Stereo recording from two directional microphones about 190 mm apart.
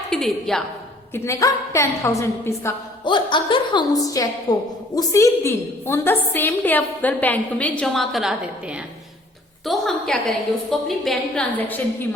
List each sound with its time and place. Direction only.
0.1 s a woman's voice: centre (ahead or behind)
1.1 s a woman's voice: 15° left (ahead or behind)